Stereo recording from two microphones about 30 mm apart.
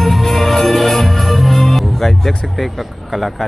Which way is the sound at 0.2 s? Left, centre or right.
Centre.